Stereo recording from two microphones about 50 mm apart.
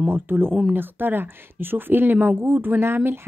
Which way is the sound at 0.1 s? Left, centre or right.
Right.